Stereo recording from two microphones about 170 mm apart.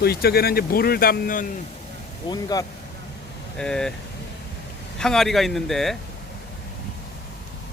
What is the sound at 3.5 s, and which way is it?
Speech, 5° left (ahead or behind).